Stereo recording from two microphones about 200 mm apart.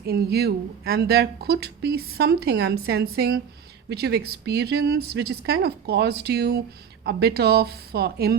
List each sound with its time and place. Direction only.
0.0 s a woman's voice: 55° right (ahead or behind)